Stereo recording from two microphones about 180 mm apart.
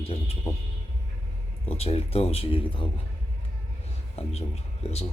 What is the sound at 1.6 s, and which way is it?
A man's voice, 35° left (ahead or behind).